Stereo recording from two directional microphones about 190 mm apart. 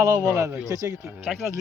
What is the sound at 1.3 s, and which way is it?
Speech, centre (ahead or behind).